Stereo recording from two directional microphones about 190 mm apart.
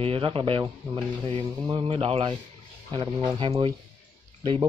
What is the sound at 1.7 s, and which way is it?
Speech, 25° right (ahead or behind).